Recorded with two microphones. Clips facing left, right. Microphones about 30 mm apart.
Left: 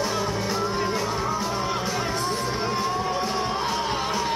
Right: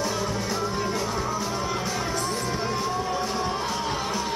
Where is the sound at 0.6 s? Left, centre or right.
Centre.